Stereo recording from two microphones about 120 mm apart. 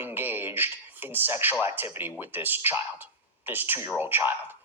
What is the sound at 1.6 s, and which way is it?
A man's voice, 20° right (ahead or behind).